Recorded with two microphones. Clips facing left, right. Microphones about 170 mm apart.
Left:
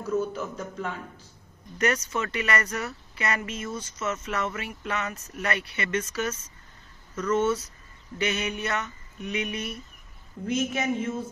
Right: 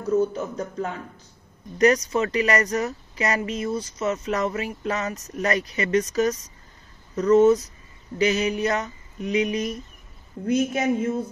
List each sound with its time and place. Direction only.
0.1 s speech: 30° right (ahead or behind)